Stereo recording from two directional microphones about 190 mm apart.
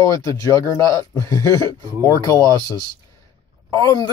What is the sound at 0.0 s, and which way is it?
Speech, 20° left (ahead or behind).